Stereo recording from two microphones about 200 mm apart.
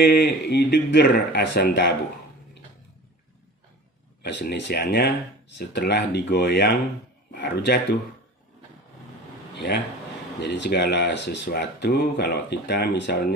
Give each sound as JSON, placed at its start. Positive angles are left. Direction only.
{"t": 0.0, "sound": "speech", "side_deg": 55}
{"t": 4.2, "sound": "speech", "side_deg": 55}
{"t": 10.4, "sound": "speech", "side_deg": 55}